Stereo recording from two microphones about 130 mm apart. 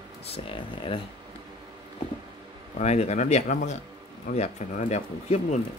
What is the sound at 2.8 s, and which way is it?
Speech, 60° left (ahead or behind).